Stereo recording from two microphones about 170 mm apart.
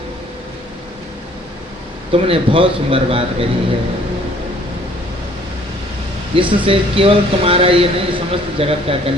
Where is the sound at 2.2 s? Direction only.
30° right (ahead or behind).